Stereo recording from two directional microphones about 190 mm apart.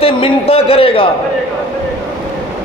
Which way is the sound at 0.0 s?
30° left (ahead or behind).